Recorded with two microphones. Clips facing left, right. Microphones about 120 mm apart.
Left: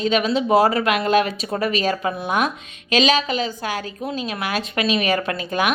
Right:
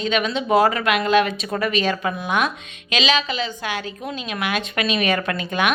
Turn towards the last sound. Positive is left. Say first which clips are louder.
# even
turn(degrees=35)  # may be behind; listen again after turning